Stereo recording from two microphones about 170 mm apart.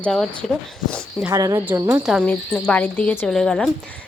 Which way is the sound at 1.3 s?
20° right (ahead or behind).